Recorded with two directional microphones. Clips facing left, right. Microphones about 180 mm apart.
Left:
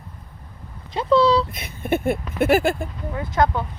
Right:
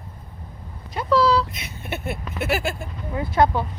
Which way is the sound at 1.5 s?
50° left (ahead or behind).